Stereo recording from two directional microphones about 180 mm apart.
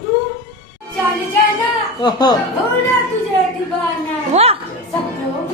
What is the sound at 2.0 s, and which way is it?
Speech, 25° left (ahead or behind).